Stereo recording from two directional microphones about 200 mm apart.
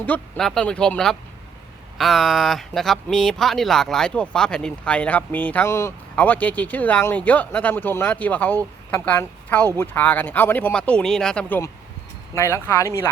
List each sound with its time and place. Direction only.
0.0 s a woman's voice: 5° left (ahead or behind)